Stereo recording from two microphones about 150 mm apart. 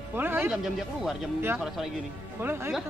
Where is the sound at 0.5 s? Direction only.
Centre (ahead or behind).